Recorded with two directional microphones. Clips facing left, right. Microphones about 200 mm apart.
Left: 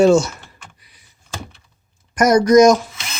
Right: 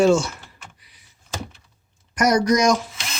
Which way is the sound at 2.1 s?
45° left (ahead or behind).